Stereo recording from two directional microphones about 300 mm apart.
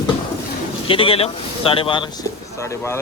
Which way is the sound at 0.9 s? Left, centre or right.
Centre.